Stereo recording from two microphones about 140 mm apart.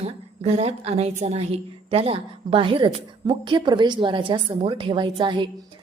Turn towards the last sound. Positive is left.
turn(degrees=-35)  # may be behind; listen again after turning